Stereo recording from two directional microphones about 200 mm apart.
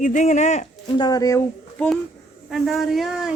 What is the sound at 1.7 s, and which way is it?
Speech, 5° left (ahead or behind).